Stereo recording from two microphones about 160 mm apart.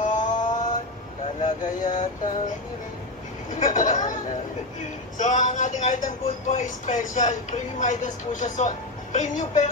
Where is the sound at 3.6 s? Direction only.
50° left (ahead or behind).